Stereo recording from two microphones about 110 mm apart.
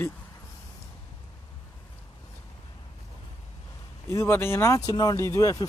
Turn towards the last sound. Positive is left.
turn(degrees=30)  # may be behind; listen again after turning